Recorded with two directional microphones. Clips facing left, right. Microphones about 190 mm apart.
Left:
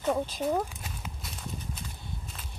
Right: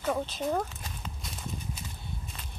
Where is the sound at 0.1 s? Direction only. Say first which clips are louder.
Left 2 dB; 10° left (ahead or behind).